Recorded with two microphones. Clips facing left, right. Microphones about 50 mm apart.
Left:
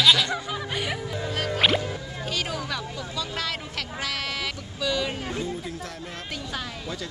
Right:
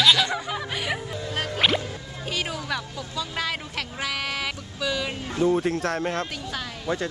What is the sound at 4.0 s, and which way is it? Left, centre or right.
Sheep, centre.